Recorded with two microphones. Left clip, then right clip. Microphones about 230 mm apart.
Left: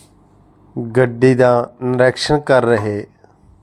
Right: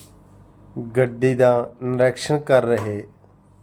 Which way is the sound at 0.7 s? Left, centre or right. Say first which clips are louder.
Left 5 dB; centre.